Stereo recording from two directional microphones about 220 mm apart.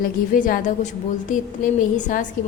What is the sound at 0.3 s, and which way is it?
A woman's voice, 35° left (ahead or behind).